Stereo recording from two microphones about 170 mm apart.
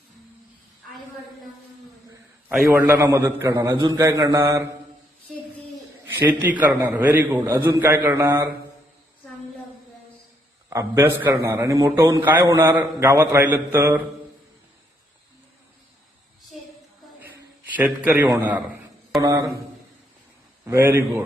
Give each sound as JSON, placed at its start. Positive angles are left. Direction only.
{"t": 2.6, "sound": "a man's voice", "side_deg": -15}
{"t": 3.7, "sound": "a man's voice", "side_deg": -25}
{"t": 6.1, "sound": "a man's voice", "side_deg": -10}
{"t": 10.7, "sound": "a man's voice", "side_deg": -15}
{"t": 17.2, "sound": "a sound", "side_deg": -10}
{"t": 19.2, "sound": "a man's voice", "side_deg": -20}
{"t": 20.7, "sound": "a man's voice", "side_deg": -15}